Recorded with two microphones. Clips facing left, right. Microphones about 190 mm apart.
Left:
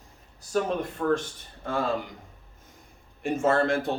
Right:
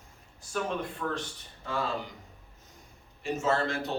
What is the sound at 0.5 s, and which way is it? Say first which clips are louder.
Speech: left 6 dB; 45° left (ahead or behind).